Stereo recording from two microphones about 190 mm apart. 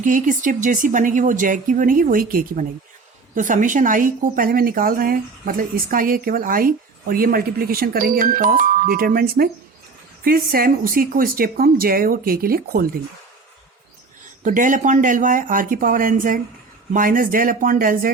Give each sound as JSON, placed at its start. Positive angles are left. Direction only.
{"t": 0.0, "sound": "a woman's voice", "side_deg": -45}
{"t": 14.4, "sound": "a woman's voice", "side_deg": -45}